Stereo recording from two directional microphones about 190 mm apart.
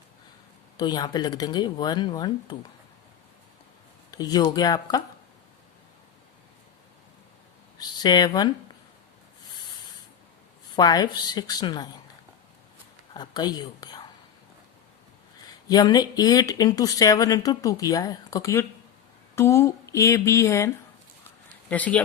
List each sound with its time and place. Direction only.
0.8 s speech: 20° left (ahead or behind)
4.1 s speech: 20° left (ahead or behind)
7.8 s speech: 20° left (ahead or behind)
10.8 s speech: 20° left (ahead or behind)
13.1 s speech: 20° left (ahead or behind)
15.7 s speech: 20° left (ahead or behind)
21.7 s speech: 5° left (ahead or behind)